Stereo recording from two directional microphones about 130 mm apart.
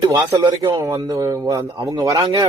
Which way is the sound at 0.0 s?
25° right (ahead or behind).